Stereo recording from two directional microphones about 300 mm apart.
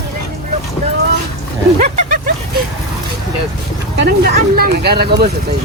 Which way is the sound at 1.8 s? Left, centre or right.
Right.